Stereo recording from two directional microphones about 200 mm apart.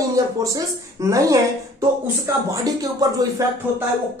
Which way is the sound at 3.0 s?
20° right (ahead or behind).